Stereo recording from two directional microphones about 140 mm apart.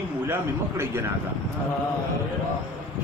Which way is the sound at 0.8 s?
20° right (ahead or behind).